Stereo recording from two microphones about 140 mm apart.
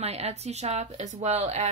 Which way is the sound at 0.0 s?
50° right (ahead or behind).